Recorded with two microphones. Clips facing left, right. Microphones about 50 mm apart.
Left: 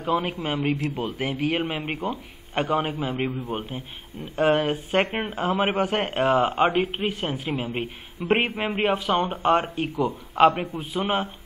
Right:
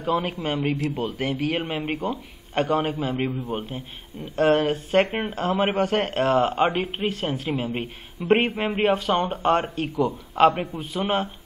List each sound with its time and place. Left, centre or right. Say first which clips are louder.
0.0 s a man's voice: even; centre
5.1 s speech: right 1 dB; centre
5.4 s a man's voice: right 1 dB; centre